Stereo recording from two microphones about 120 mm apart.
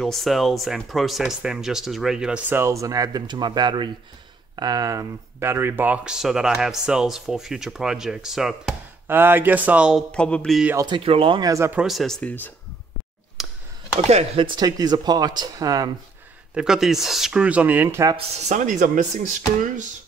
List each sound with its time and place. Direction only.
0.0 s speech: centre (ahead or behind)
2.5 s speech: 25° right (ahead or behind); by 8.7 s 5° right (ahead or behind)
9.0 s speech: 15° right (ahead or behind)
10.1 s a sound: 10° left (ahead or behind)
10.9 s speech: 50° right (ahead or behind)
11.4 s speech: 25° right (ahead or behind)
11.7 s speech: 5° right (ahead or behind)
12.2 s a sound: 15° left (ahead or behind)
13.4 s a sound: 5° right (ahead or behind)
14.0 s speech: 60° right (ahead or behind)
14.4 s speech: 35° right (ahead or behind)
16.5 s speech: 5° right (ahead or behind)
17.8 s speech: 25° right (ahead or behind)
18.4 s speech: 85° right